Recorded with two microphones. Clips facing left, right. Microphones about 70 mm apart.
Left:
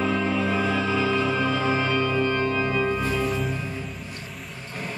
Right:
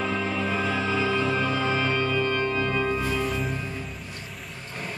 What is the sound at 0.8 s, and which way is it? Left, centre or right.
Music, centre.